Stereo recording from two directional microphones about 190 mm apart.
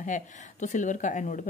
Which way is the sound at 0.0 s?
40° left (ahead or behind).